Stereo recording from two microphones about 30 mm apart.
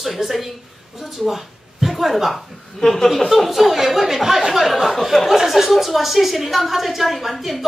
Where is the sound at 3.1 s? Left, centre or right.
Centre.